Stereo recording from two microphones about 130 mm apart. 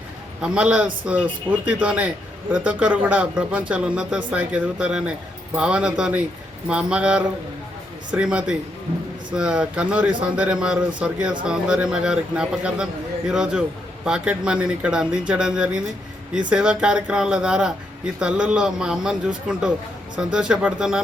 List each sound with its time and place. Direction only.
0.4 s a man's voice: 10° right (ahead or behind)